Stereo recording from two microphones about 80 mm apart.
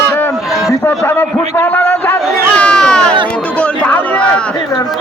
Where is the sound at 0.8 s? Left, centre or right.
Left.